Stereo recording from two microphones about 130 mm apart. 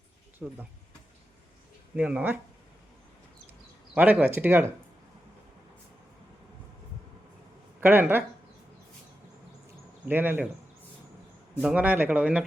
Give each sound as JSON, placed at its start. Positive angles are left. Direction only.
{"t": 0.4, "sound": "speech", "side_deg": -5}
{"t": 2.0, "sound": "speech", "side_deg": -10}
{"t": 3.9, "sound": "speech", "side_deg": -10}
{"t": 7.8, "sound": "speech", "side_deg": -15}
{"t": 10.1, "sound": "speech", "side_deg": -15}
{"t": 11.5, "sound": "speech", "side_deg": -10}